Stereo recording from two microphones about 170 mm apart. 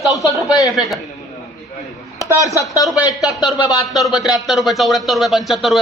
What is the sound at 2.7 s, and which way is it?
Speech, 20° left (ahead or behind).